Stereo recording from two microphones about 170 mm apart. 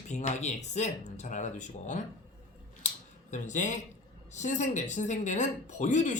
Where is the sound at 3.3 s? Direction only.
45° left (ahead or behind).